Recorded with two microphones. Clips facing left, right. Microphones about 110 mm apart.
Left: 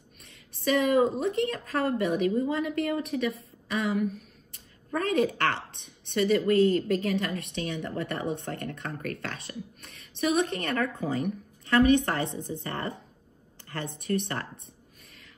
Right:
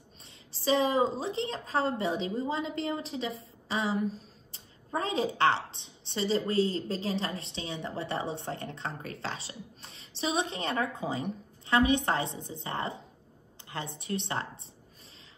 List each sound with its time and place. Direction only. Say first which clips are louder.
0.2 s speech: left 4 dB; 20° right (ahead or behind)
6.5 s a woman's voice: left 8 dB; 55° left (ahead or behind)
6.9 s a woman's voice: left 5 dB; 25° right (ahead or behind)